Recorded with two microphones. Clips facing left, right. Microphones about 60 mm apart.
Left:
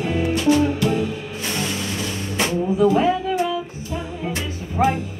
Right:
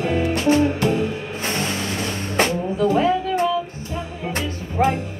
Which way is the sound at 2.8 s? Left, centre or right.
Centre.